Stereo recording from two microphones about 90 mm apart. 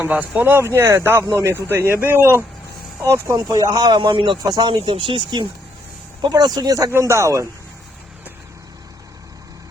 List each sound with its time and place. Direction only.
0.0 s speech: 15° right (ahead or behind); by 3.3 s 35° right (ahead or behind)
3.3 s a man's voice: 50° right (ahead or behind)
4.4 s speech: 50° right (ahead or behind); by 5.5 s 65° right (ahead or behind)
6.2 s a man's voice: 45° right (ahead or behind)